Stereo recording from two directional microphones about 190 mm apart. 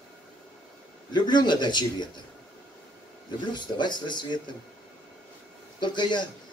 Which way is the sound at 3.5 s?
25° left (ahead or behind).